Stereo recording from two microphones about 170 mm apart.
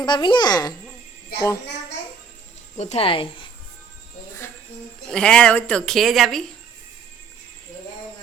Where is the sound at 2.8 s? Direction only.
40° left (ahead or behind).